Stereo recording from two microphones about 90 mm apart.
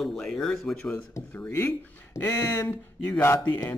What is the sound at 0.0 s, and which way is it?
Speech, 5° left (ahead or behind).